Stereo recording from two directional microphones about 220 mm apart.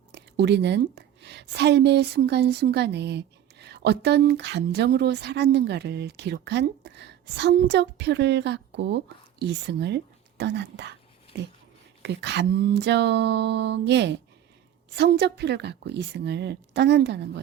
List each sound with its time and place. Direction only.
0.1 s a woman's voice: 50° right (ahead or behind)
12.0 s a woman's voice: 50° right (ahead or behind)